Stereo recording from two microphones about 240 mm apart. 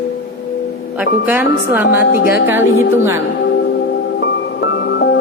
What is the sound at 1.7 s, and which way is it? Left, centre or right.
Speech, centre.